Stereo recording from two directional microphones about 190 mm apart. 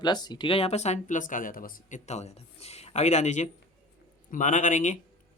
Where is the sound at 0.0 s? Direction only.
20° left (ahead or behind).